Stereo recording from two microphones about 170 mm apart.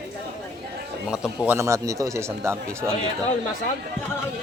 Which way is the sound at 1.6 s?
20° right (ahead or behind).